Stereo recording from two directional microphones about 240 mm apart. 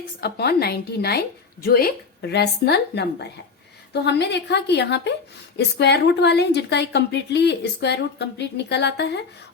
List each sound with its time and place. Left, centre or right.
0.2 s a woman's voice: left